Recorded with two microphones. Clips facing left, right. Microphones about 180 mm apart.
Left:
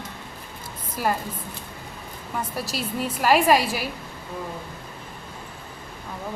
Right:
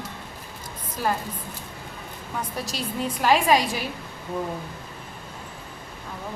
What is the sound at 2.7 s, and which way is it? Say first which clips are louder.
Speech: even; 5° left (ahead or behind).